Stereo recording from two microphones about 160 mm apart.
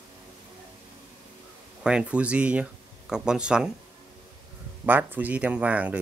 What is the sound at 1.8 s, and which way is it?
Speech, 5° right (ahead or behind).